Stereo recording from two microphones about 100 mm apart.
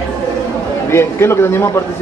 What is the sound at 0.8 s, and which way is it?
Speech, 25° left (ahead or behind).